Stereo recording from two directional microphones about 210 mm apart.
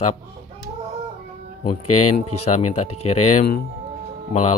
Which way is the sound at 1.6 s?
35° left (ahead or behind).